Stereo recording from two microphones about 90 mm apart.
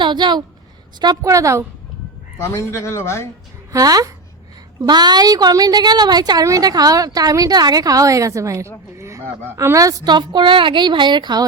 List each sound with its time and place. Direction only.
0.0 s a woman's voice: 55° right (ahead or behind)
0.9 s a woman's voice: 45° right (ahead or behind)
2.4 s speech: 30° left (ahead or behind)
3.7 s a woman's voice: 40° right (ahead or behind)
9.0 s a sound: 35° right (ahead or behind)
9.6 s a woman's voice: 35° right (ahead or behind); by 11.4 s 55° right (ahead or behind)